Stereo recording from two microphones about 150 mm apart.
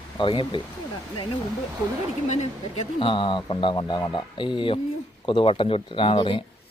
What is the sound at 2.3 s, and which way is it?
Speech, 50° left (ahead or behind).